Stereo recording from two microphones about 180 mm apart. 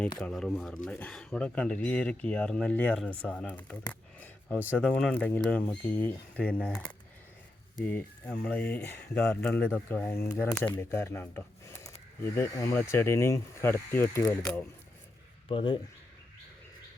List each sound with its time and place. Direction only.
0.2 s speech: 5° left (ahead or behind)
15.4 s speech: 30° left (ahead or behind)